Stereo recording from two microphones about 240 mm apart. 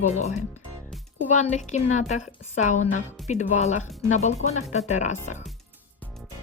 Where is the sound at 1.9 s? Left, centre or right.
Left.